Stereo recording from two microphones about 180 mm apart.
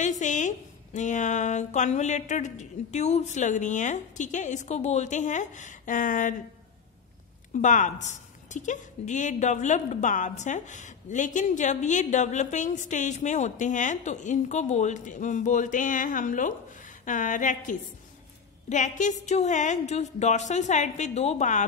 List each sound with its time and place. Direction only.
0.0 s a woman's voice: 40° left (ahead or behind)
7.5 s a woman's voice: 45° left (ahead or behind)